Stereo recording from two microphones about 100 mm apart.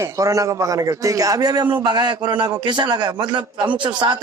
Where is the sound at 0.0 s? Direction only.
35° right (ahead or behind).